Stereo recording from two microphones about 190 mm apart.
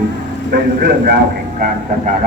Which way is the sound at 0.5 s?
50° right (ahead or behind).